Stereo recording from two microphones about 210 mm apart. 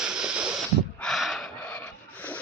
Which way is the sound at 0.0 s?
5° right (ahead or behind).